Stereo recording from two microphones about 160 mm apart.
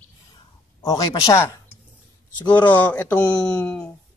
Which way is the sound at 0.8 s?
20° left (ahead or behind).